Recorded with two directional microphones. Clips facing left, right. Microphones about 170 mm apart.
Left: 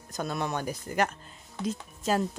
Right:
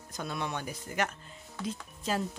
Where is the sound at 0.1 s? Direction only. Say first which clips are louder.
Left 4 dB; 45° left (ahead or behind).